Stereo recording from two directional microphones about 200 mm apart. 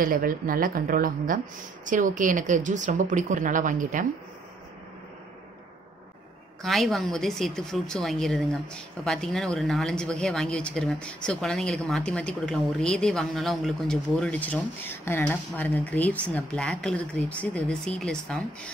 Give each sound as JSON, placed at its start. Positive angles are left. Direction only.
{"t": 0.0, "sound": "speech", "side_deg": -45}
{"t": 6.6, "sound": "speech", "side_deg": 0}